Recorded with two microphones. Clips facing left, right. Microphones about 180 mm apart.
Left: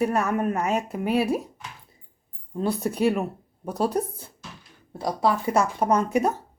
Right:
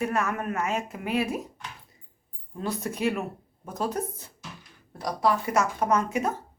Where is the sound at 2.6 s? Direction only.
35° left (ahead or behind).